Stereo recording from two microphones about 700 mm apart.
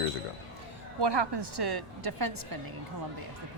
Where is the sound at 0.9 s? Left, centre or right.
Right.